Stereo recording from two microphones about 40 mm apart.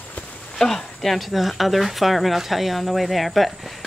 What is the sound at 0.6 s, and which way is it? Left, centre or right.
Speech, centre.